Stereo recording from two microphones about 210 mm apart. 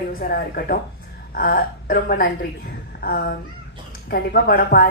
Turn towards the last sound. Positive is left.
turn(degrees=45)  # may be behind; listen again after turning